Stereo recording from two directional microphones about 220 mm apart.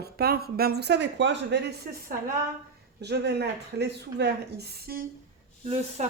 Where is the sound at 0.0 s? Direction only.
45° right (ahead or behind).